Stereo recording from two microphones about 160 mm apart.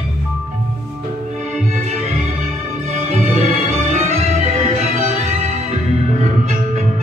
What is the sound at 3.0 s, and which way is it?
Music, 45° right (ahead or behind).